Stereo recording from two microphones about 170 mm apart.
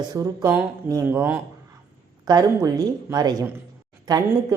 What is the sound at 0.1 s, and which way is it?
A woman's voice, 20° right (ahead or behind).